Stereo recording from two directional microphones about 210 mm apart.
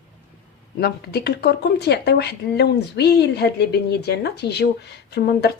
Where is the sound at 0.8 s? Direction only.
50° left (ahead or behind).